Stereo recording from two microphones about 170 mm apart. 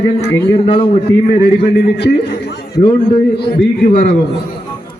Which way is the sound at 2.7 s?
25° left (ahead or behind).